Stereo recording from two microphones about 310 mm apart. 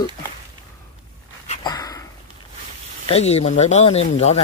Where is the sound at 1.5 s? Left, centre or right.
Centre.